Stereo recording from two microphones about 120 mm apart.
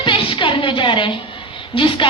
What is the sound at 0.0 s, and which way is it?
Music, 45° left (ahead or behind).